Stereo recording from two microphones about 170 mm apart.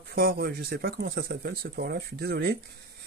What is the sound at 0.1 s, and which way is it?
Speech, 65° right (ahead or behind).